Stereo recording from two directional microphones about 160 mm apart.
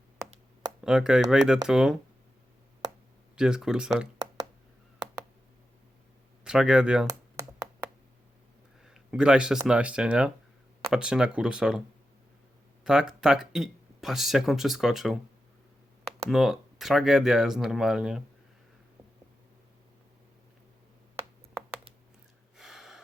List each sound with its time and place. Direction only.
0.9 s speech: 5° right (ahead or behind)
3.3 s speech: 5° right (ahead or behind)
6.4 s speech: 5° right (ahead or behind)
7.1 s a sound: 20° right (ahead or behind)
8.8 s a sound: 5° right (ahead or behind)
9.6 s speech: 5° right (ahead or behind)
12.8 s speech: 5° right (ahead or behind)
16.3 s speech: centre (ahead or behind)
22.5 s gasp: centre (ahead or behind)